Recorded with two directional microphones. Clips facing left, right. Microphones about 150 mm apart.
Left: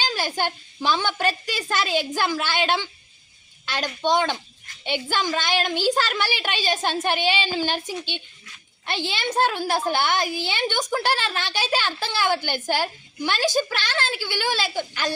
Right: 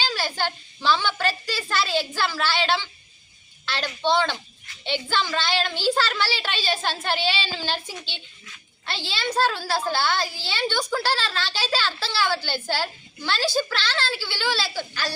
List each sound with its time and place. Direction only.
0.1 s a woman's voice: 15° left (ahead or behind)